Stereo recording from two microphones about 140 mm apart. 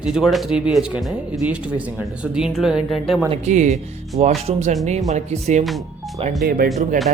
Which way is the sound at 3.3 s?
55° right (ahead or behind).